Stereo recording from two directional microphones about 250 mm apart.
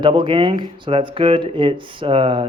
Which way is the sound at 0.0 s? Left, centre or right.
Centre.